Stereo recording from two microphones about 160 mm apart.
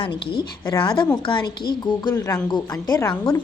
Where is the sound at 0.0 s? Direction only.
30° left (ahead or behind).